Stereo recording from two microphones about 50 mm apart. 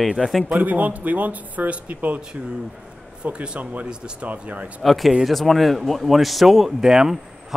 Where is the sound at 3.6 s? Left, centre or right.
Right.